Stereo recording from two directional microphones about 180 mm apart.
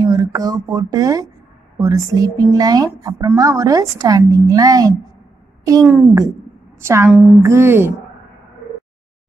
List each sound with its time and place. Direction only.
0.0 s a woman's voice: 20° right (ahead or behind)